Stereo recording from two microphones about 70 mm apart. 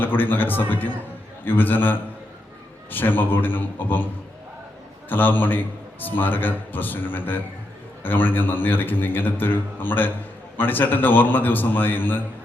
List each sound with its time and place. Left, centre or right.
0.0 s a man's voice: left